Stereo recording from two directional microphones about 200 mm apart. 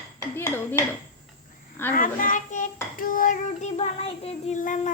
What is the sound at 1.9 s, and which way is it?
Dishes, 45° left (ahead or behind).